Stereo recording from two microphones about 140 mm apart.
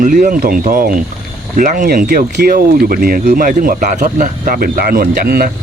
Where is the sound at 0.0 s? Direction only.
65° right (ahead or behind).